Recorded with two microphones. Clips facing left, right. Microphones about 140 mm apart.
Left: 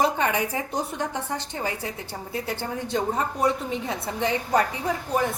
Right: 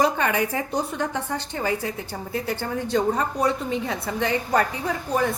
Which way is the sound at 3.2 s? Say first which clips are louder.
Right 1 dB; 5° left (ahead or behind).